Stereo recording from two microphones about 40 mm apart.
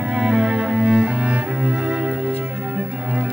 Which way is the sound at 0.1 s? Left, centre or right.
Centre.